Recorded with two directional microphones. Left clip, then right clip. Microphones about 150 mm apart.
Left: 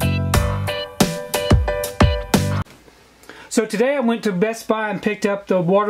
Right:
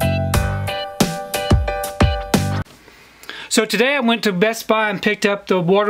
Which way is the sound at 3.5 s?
25° right (ahead or behind).